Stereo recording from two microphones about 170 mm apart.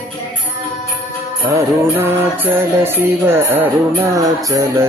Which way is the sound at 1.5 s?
15° right (ahead or behind).